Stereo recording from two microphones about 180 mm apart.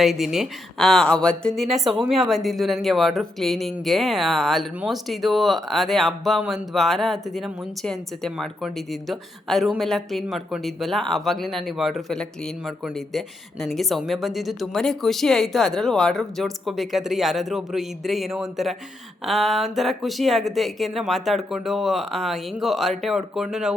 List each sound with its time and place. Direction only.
0.0 s a woman's voice: centre (ahead or behind)